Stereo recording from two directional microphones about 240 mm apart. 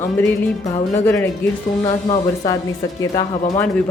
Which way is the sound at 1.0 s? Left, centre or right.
Centre.